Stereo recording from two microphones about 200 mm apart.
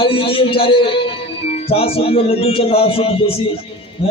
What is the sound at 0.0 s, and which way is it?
A man's voice, 25° left (ahead or behind).